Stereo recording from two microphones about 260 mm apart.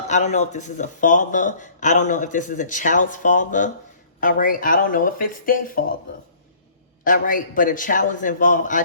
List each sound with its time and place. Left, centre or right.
0.1 s a man's voice: left
7.0 s a man's voice: left